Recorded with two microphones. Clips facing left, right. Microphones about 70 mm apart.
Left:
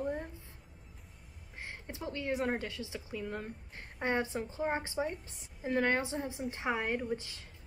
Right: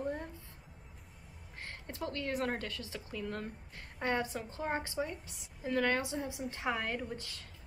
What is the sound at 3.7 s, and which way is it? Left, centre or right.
A woman's voice, left.